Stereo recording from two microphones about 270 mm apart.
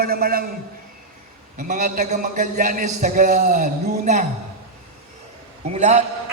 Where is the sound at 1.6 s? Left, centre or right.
Right.